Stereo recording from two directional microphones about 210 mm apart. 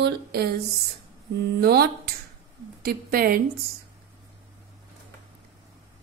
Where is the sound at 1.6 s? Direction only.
50° right (ahead or behind).